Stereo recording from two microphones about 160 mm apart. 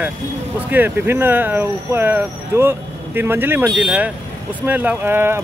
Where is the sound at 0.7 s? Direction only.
10° right (ahead or behind).